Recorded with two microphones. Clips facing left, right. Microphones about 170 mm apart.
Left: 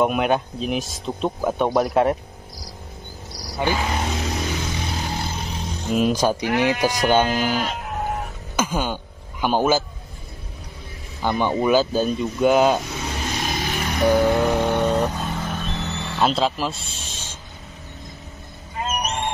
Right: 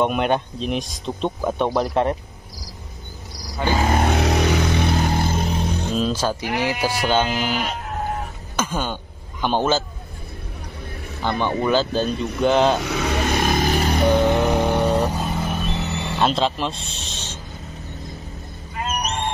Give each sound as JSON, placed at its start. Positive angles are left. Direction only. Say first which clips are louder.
{"t": 0.0, "sound": "speech", "louder": "even", "side_deg": 5}
{"t": 3.7, "sound": "vehicle", "louder": "right 5 dB", "side_deg": -50}
{"t": 5.9, "sound": "speech", "louder": "left 5 dB", "side_deg": 15}
{"t": 8.5, "sound": "speech", "louder": "left 1 dB", "side_deg": 10}
{"t": 11.2, "sound": "speech", "louder": "left 1 dB", "side_deg": 10}
{"t": 12.8, "sound": "vehicle", "louder": "right 6 dB", "side_deg": -75}
{"t": 16.2, "sound": "speech", "louder": "even", "side_deg": 5}
{"t": 18.8, "sound": "music", "louder": "even", "side_deg": 25}